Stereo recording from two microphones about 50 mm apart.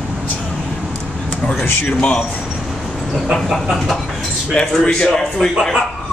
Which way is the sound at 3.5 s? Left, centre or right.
Centre.